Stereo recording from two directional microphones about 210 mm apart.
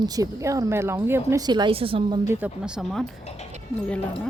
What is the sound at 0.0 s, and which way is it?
Speech, 15° right (ahead or behind).